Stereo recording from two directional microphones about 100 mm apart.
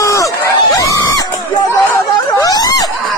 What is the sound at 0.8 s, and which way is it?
Screaming, 35° left (ahead or behind).